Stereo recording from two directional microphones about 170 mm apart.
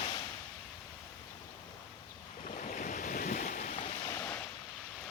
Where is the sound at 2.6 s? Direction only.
50° left (ahead or behind).